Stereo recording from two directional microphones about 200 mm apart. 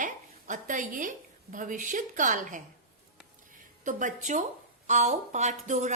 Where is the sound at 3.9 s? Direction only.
40° right (ahead or behind).